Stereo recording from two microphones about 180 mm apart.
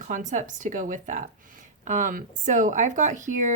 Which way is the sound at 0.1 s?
45° right (ahead or behind).